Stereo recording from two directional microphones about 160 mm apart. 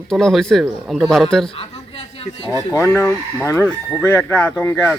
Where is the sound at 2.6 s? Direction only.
20° left (ahead or behind).